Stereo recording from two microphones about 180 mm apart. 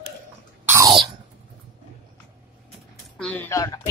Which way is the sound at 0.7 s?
20° right (ahead or behind).